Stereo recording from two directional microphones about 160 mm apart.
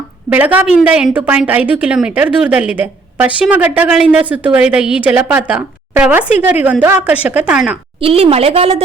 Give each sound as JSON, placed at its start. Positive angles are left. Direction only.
{"t": 0.3, "sound": "a woman's voice", "side_deg": -10}
{"t": 8.0, "sound": "a woman's voice", "side_deg": -35}